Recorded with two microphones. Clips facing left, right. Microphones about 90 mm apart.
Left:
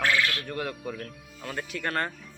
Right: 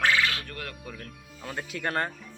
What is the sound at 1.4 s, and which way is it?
Speech, 20° right (ahead or behind).